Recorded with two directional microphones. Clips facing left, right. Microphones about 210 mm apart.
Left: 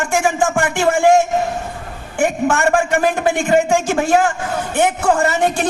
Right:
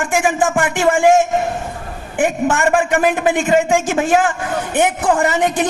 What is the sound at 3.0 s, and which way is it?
A man's voice, 15° right (ahead or behind).